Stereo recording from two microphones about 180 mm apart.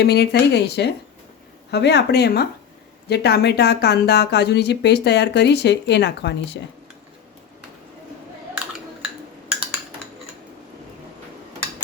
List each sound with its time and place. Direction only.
0.0 s speech: 65° left (ahead or behind)